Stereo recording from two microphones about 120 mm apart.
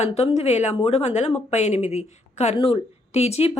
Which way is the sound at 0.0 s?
60° left (ahead or behind).